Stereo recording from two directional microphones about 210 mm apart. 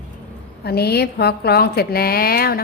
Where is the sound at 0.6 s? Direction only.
50° left (ahead or behind).